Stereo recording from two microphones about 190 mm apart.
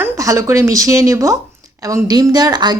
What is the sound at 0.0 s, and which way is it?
Speech, 15° right (ahead or behind).